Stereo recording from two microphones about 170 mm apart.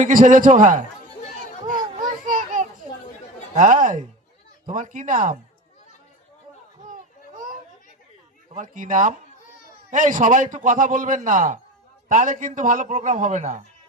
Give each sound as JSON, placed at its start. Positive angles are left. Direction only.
{"t": 0.0, "sound": "a man's voice", "side_deg": -50}
{"t": 2.0, "sound": "children playing", "side_deg": -50}
{"t": 3.5, "sound": "a man's voice", "side_deg": -45}
{"t": 6.8, "sound": "a sound", "side_deg": -50}
{"t": 8.5, "sound": "a man's voice", "side_deg": -50}